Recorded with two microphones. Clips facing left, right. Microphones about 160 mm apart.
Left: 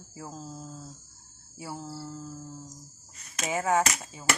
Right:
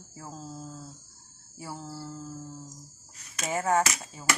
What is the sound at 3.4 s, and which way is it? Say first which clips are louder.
Speech: even; centre (ahead or behind).